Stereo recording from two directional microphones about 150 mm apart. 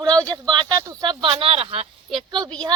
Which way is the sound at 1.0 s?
35° right (ahead or behind).